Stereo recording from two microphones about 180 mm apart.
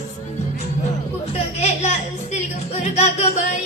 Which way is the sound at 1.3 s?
35° left (ahead or behind).